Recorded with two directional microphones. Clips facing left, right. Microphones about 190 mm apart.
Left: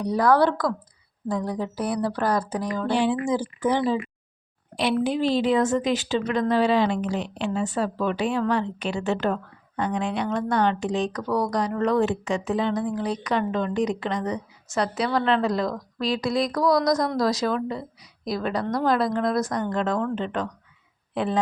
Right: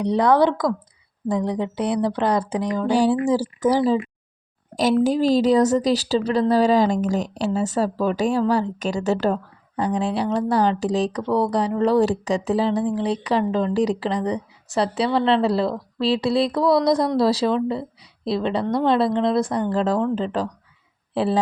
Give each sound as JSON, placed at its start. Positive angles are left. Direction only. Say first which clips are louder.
{"t": 0.0, "sound": "speech", "louder": "right 3 dB", "side_deg": -20}
{"t": 2.6, "sound": "a sound", "louder": "right 4 dB", "side_deg": -15}
{"t": 2.9, "sound": "a woman's voice", "louder": "right 5 dB", "side_deg": -40}